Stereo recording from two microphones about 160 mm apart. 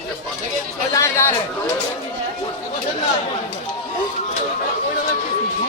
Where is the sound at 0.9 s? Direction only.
15° left (ahead or behind).